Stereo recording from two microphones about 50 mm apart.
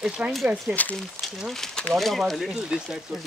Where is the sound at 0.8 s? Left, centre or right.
Left.